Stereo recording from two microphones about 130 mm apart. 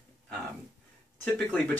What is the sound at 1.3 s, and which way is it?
Speech, 10° left (ahead or behind).